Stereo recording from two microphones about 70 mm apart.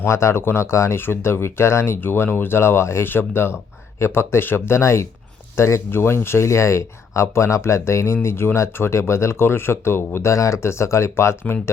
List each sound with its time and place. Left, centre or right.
0.0 s speech: left
10.2 s speech: left